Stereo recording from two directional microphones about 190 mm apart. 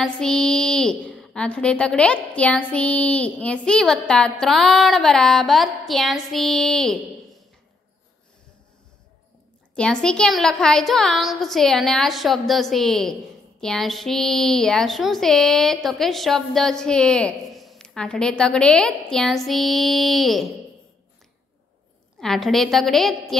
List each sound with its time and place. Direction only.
0.0 s a woman's voice: 5° left (ahead or behind)
9.8 s a woman's voice: 5° left (ahead or behind)
22.2 s a woman's voice: centre (ahead or behind)